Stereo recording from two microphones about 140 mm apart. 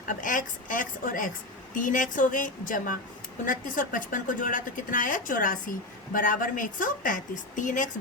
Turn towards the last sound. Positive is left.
turn(degrees=65)  # may be behind; listen again after turning